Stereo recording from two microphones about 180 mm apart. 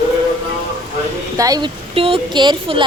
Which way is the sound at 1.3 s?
20° right (ahead or behind).